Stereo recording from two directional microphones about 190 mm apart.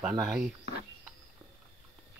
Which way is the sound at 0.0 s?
Centre (ahead or behind).